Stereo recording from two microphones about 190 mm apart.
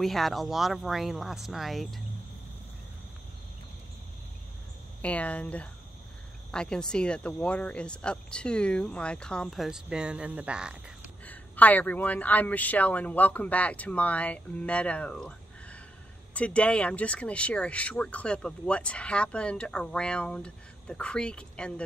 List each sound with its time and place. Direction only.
0.0 s speech: centre (ahead or behind)
5.0 s a man's voice: 5° left (ahead or behind)
11.2 s a man's voice: 10° left (ahead or behind)